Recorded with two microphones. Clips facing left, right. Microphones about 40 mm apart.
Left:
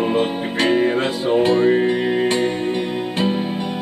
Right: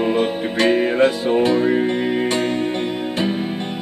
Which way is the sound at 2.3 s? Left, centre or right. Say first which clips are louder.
Left 1 dB; left.